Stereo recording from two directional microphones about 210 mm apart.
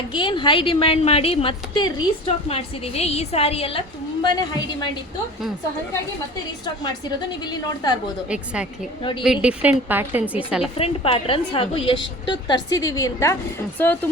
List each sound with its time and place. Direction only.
0.1 s a woman's voice: 25° left (ahead or behind)
7.2 s a woman's voice: 20° left (ahead or behind)
9.2 s a woman's voice: 5° right (ahead or behind)
10.8 s a woman's voice: 25° left (ahead or behind); by 14.1 s 10° left (ahead or behind)